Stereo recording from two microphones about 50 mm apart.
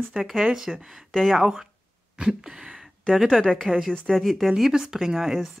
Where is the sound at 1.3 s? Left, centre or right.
Centre.